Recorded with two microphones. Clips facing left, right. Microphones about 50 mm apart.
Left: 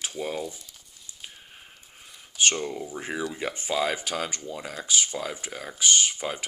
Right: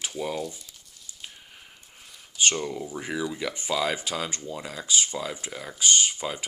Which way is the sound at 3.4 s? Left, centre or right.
Left.